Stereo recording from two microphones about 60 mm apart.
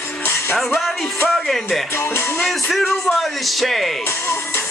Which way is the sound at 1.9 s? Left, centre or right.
Left.